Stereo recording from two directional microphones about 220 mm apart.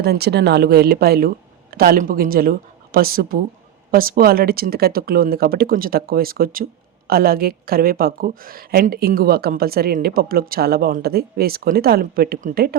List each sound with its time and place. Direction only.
0.0 s a woman's voice: 50° right (ahead or behind)